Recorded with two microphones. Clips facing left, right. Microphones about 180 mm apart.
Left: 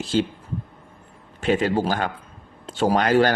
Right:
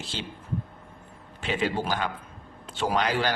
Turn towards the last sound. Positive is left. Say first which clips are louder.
# left 8 dB
turn(degrees=50)  # may be behind; listen again after turning